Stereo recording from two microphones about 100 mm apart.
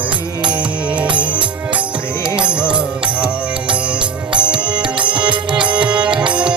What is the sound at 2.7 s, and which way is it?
Music, 10° right (ahead or behind).